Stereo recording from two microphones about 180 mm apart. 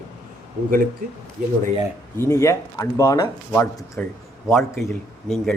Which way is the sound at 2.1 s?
15° left (ahead or behind).